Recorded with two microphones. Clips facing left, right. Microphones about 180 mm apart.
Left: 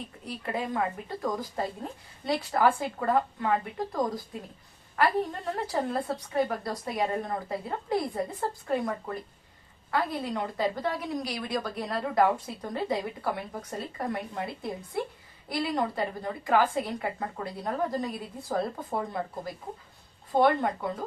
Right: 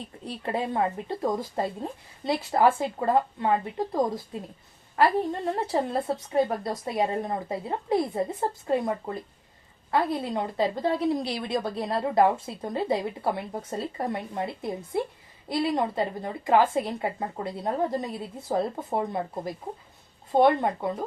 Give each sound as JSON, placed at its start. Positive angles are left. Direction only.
{"t": 0.3, "sound": "a woman's voice", "side_deg": -30}